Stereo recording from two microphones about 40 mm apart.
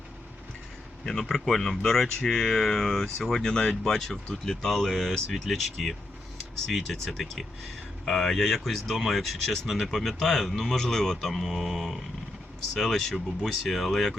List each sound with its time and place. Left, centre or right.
1.3 s speech: centre
11.4 s speech: centre
12.7 s speech: centre